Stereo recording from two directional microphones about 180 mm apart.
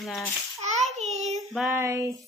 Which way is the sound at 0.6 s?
40° right (ahead or behind).